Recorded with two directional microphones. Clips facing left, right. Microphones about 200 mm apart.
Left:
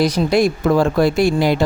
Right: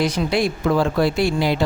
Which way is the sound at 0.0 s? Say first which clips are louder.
Left 5 dB; 45° left (ahead or behind).